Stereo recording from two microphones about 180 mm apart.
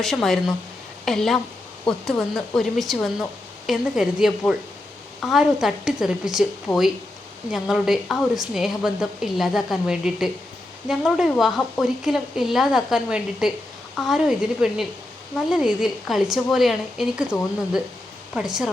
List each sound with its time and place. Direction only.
0.0 s speech: centre (ahead or behind)
7.5 s speech: centre (ahead or behind)